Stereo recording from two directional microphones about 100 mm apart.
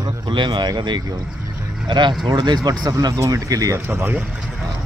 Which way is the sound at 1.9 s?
50° right (ahead or behind).